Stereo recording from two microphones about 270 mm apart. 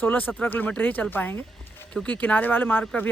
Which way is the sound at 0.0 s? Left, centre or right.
Centre.